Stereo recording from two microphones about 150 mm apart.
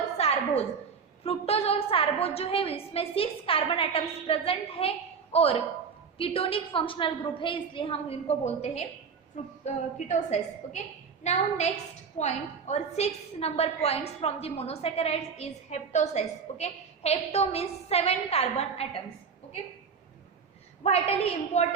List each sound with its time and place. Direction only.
0.2 s a sound: 45° left (ahead or behind)
1.2 s a woman's voice: 40° left (ahead or behind)
20.8 s a woman's voice: 45° left (ahead or behind)